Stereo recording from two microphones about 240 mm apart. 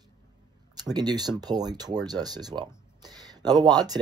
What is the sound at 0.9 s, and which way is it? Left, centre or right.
Speech, centre.